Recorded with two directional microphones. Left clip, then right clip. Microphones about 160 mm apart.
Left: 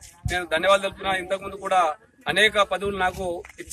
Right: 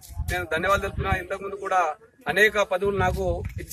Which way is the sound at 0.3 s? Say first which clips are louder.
Left 3 dB; 20° left (ahead or behind).